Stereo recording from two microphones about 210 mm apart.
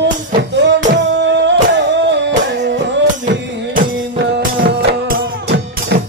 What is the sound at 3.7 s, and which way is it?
Music, 40° right (ahead or behind).